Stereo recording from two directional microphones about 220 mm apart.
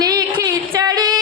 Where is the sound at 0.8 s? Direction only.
20° right (ahead or behind).